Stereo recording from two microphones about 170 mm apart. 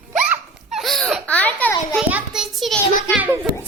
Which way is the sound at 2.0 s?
5° right (ahead or behind).